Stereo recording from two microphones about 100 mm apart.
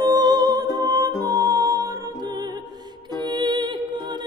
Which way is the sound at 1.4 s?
35° right (ahead or behind).